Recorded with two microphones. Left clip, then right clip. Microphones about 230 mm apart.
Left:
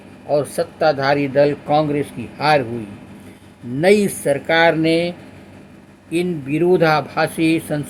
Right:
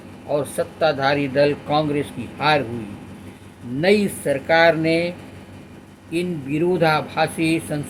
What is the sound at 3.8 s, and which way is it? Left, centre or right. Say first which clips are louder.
Speech: left 4 dB; left.